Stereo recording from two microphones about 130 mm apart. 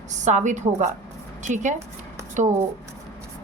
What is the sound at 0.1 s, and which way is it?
A woman's voice, 65° right (ahead or behind).